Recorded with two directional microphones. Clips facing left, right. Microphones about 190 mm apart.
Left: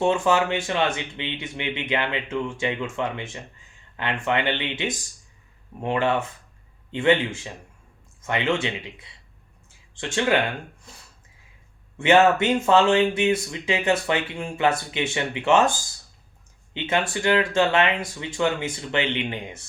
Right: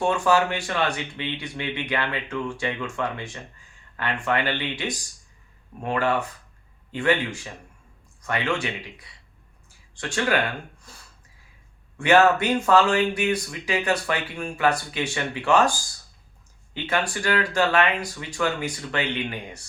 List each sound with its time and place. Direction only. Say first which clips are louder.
0.0 s speech: left 1 dB; 20° left (ahead or behind)
9.6 s a sound: left 1 dB; 20° left (ahead or behind)
11.9 s speech: left 1 dB; 25° left (ahead or behind)
16.7 s speech: left 2 dB; 20° left (ahead or behind)